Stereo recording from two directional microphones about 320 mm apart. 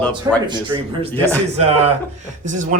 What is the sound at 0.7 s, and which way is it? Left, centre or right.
Speech, centre.